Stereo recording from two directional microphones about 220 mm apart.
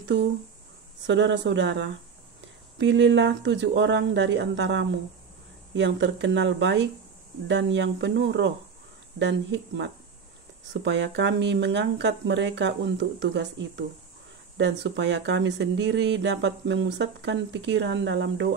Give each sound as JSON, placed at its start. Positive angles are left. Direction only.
{"t": 0.0, "sound": "speech", "side_deg": -55}